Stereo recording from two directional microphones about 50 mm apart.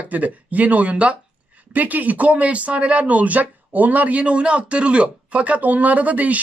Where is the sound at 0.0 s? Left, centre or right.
Right.